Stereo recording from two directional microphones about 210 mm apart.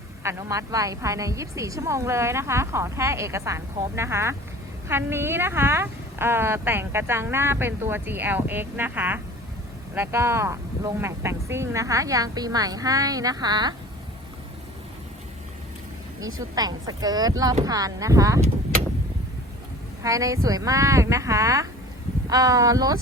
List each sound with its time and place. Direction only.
0.2 s a woman's voice: 10° right (ahead or behind)
16.2 s a woman's voice: 15° right (ahead or behind)
20.0 s a woman's voice: 15° right (ahead or behind)